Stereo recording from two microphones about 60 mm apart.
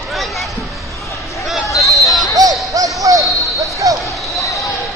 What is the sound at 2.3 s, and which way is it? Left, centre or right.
Ding, right.